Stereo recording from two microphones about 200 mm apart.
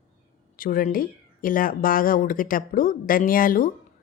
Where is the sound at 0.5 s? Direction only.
45° left (ahead or behind).